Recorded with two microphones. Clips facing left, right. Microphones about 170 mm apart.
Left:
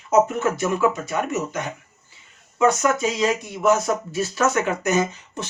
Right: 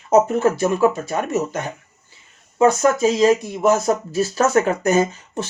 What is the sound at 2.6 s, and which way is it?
Speech, 35° right (ahead or behind).